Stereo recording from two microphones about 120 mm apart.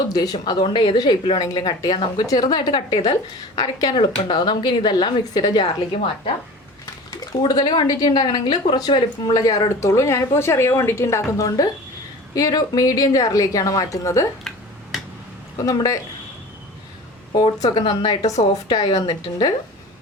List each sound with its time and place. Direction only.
0.1 s a woman's voice: 30° left (ahead or behind)
7.2 s a woman's voice: 35° left (ahead or behind)
15.5 s speech: 30° left (ahead or behind)
17.3 s a woman's voice: 40° left (ahead or behind)